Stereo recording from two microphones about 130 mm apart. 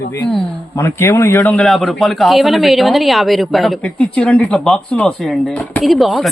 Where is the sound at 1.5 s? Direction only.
Centre (ahead or behind).